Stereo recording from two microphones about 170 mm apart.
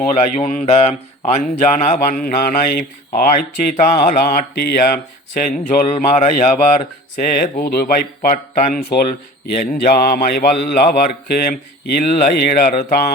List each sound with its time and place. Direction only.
0.0 s speech: 45° left (ahead or behind)
7.2 s speech: 55° left (ahead or behind)